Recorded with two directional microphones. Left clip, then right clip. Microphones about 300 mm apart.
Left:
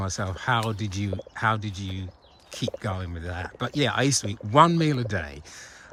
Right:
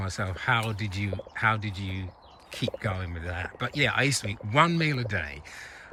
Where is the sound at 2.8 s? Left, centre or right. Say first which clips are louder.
Even; centre.